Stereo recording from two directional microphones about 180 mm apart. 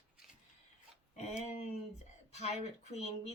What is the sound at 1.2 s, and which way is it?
Speech, 40° left (ahead or behind).